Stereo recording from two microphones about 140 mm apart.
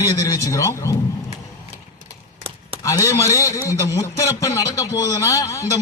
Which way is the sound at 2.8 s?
20° left (ahead or behind).